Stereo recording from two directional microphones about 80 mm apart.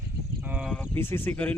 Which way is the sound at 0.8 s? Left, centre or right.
Left.